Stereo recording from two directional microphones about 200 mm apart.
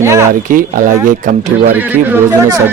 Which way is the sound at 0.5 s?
45° right (ahead or behind).